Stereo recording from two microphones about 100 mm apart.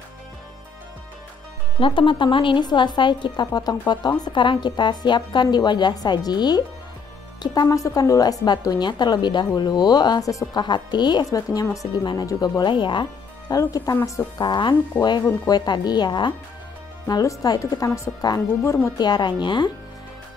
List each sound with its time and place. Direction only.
1.8 s a woman's voice: 60° left (ahead or behind)
13.5 s speech: 35° left (ahead or behind)
14.4 s a woman's voice: 50° left (ahead or behind)
17.1 s speech: 35° left (ahead or behind)
18.9 s a woman's voice: 45° left (ahead or behind)